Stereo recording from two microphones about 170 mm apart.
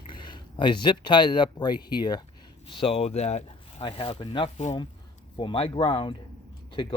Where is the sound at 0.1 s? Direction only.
30° left (ahead or behind).